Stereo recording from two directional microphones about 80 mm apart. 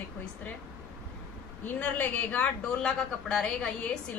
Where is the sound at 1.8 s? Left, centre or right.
Left.